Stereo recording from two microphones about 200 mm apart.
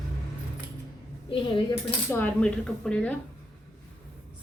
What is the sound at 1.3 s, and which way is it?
Speech, 25° left (ahead or behind).